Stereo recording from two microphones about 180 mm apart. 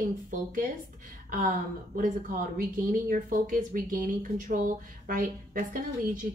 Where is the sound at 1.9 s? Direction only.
50° right (ahead or behind).